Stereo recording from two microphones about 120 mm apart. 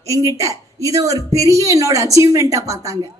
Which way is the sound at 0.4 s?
30° right (ahead or behind).